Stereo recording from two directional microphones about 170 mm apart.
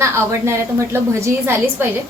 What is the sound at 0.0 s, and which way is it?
A woman's voice, 15° right (ahead or behind).